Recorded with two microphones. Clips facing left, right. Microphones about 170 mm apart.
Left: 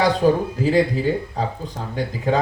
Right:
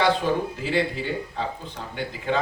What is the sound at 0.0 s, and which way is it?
Speech, 40° left (ahead or behind).